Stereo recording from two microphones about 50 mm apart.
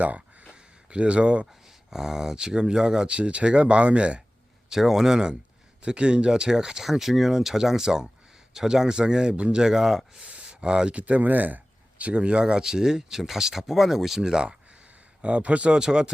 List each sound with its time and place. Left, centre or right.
0.5 s a sound: right
1.9 s speech: centre
4.7 s speech: centre
10.2 s speech: right
15.2 s speech: right